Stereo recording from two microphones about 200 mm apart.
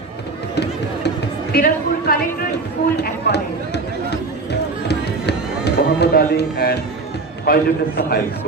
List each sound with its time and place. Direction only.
0.6 s a sound: 55° left (ahead or behind)
3.0 s run: 55° left (ahead or behind)
7.4 s a man's voice: 50° left (ahead or behind)